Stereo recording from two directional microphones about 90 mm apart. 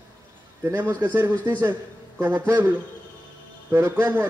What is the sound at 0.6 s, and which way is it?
A man's voice, 25° right (ahead or behind).